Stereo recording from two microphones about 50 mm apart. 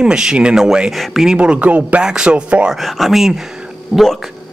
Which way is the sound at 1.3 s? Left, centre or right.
Right.